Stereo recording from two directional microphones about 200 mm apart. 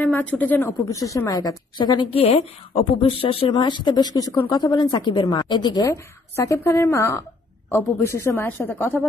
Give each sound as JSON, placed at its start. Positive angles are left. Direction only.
{"t": 0.0, "sound": "a woman's voice", "side_deg": 5}